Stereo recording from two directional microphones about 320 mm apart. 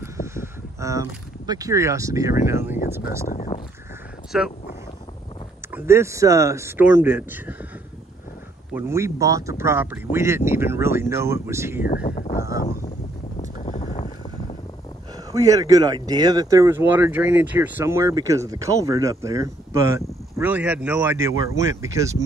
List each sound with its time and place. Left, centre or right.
0.0 s speech: centre
3.3 s speech: left
4.3 s speech: centre
5.7 s speech: centre
8.7 s speech: centre
11.9 s speech: left
12.4 s speech: centre
13.4 s boat: left
15.3 s speech: centre